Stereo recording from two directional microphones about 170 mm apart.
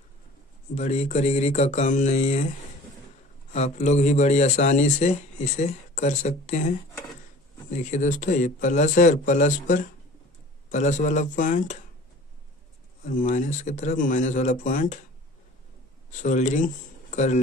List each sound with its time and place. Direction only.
0.7 s speech: 40° left (ahead or behind)
3.5 s speech: 40° left (ahead or behind)
7.7 s speech: 45° left (ahead or behind)
13.0 s speech: 50° left (ahead or behind)
16.1 s speech: 45° left (ahead or behind)